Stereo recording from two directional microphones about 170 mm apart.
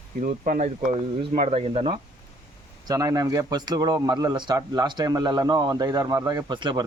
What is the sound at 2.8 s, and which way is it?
Speech, 20° right (ahead or behind).